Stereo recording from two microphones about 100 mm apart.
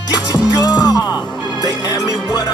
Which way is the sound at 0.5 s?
40° left (ahead or behind).